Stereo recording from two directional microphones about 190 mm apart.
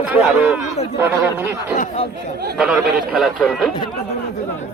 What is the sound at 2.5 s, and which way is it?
Speech, 5° right (ahead or behind).